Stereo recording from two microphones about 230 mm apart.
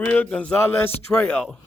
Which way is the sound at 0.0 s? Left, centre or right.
Centre.